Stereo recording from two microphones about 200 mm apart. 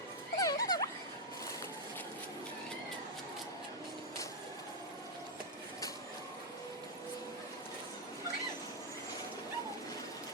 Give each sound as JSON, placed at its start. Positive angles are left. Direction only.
{"t": 0.3, "sound": "music", "side_deg": 15}